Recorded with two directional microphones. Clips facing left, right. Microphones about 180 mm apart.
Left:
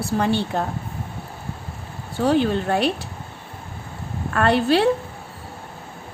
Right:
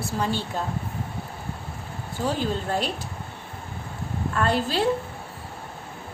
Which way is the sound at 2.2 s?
65° left (ahead or behind).